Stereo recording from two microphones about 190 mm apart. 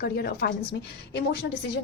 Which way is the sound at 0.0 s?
55° left (ahead or behind).